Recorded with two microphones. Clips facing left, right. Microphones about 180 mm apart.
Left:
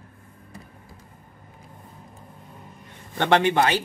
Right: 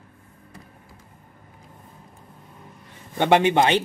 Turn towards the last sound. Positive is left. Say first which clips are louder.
# right 2 dB
turn(degrees=-20)  # may be behind; listen again after turning